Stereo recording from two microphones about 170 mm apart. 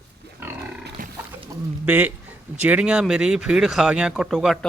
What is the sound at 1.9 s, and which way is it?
Speech, 10° right (ahead or behind).